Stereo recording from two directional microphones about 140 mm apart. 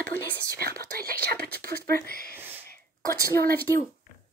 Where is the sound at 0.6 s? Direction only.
90° right.